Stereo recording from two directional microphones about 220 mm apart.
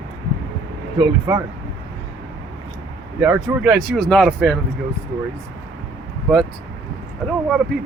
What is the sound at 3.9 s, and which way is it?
Speech, 5° left (ahead or behind).